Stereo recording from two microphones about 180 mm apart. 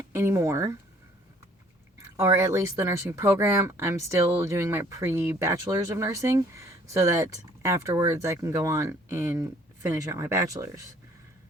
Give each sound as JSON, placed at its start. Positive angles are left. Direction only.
{"t": 0.1, "sound": "speech", "side_deg": -15}
{"t": 2.1, "sound": "speech", "side_deg": -15}